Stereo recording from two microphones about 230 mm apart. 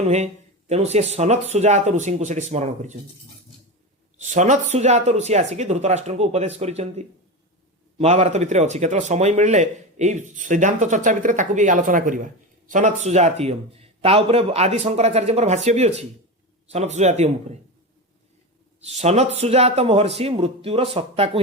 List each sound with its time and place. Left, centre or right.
0.7 s speech: right
4.2 s speech: right
18.8 s speech: right